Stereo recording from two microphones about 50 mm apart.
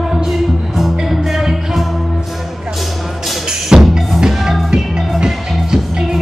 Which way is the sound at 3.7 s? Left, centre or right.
Centre.